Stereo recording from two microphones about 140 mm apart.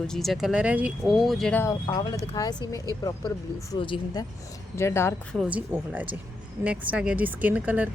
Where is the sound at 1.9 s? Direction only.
30° left (ahead or behind).